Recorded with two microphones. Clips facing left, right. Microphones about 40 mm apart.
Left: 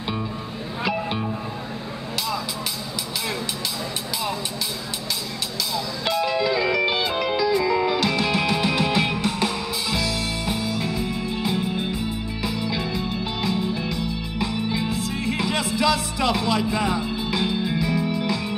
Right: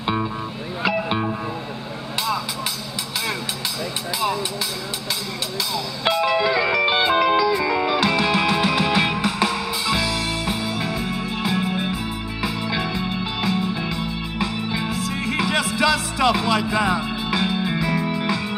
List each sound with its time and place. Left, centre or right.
0.0 s music: right
5.7 s music: right
11.7 s music: right
15.1 s music: right